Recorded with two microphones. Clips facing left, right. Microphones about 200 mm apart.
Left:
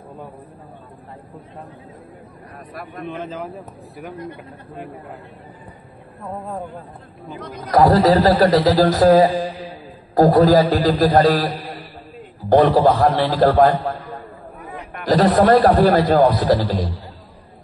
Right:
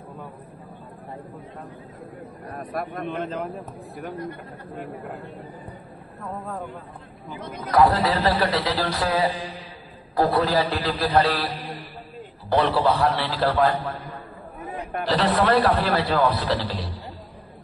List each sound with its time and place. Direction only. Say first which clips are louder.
2.7 s a man's voice: right 3 dB; 45° right (ahead or behind)
3.1 s speech: left 4 dB; centre (ahead or behind)
7.6 s a man's voice: left 6 dB; 40° left (ahead or behind)
15.0 s a man's voice: left 7 dB; 45° left (ahead or behind)